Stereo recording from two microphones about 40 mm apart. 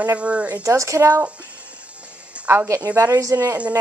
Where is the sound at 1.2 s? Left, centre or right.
Right.